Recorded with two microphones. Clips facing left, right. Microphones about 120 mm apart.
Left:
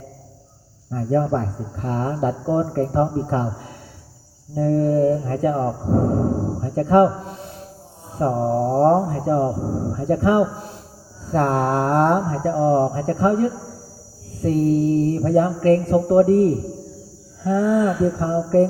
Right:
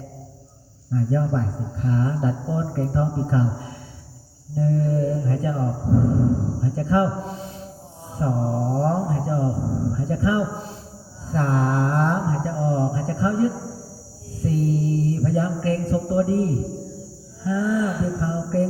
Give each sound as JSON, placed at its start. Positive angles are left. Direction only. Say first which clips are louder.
{"t": 0.9, "sound": "speech", "louder": "left 3 dB", "side_deg": 50}
{"t": 6.6, "sound": "mantra", "louder": "left 9 dB", "side_deg": 55}
{"t": 8.2, "sound": "speech", "louder": "left 5 dB", "side_deg": 50}
{"t": 14.4, "sound": "mantra", "louder": "left 5 dB", "side_deg": 60}